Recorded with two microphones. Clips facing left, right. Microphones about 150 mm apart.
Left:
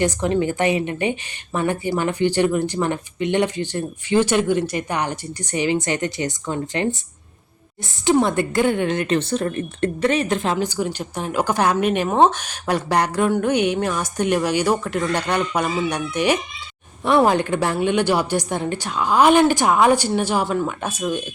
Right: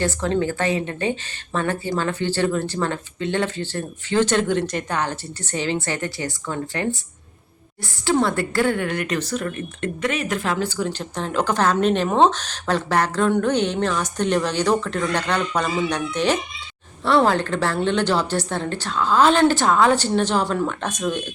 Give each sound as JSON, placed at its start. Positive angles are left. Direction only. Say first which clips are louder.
{"t": 0.0, "sound": "a woman's voice", "louder": "left 2 dB", "side_deg": 15}
{"t": 8.0, "sound": "a woman's voice", "louder": "left 3 dB", "side_deg": 20}